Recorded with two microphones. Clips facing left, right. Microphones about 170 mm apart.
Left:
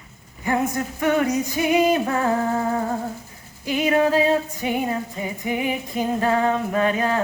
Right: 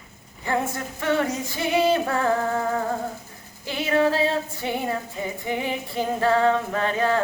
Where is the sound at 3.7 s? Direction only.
15° left (ahead or behind).